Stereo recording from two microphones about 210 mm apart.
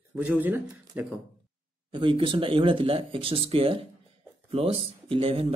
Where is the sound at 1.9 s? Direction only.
25° right (ahead or behind).